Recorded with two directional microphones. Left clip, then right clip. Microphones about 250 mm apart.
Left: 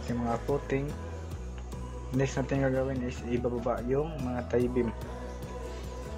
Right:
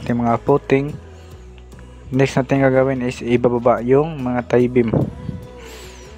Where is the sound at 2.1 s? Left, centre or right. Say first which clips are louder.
Right 14 dB; right.